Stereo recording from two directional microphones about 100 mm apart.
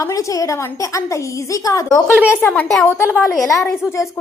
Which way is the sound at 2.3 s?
20° left (ahead or behind).